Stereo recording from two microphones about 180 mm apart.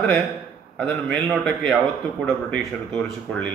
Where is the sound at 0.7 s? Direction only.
Centre (ahead or behind).